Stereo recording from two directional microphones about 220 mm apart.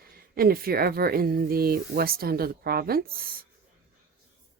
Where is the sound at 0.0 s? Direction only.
45° right (ahead or behind).